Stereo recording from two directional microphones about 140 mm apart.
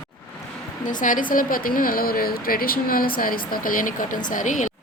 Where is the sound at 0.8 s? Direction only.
70° left (ahead or behind).